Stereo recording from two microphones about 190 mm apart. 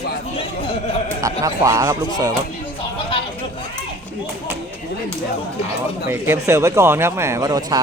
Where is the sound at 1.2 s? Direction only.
15° right (ahead or behind).